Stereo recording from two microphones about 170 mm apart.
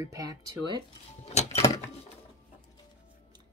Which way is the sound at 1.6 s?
20° left (ahead or behind).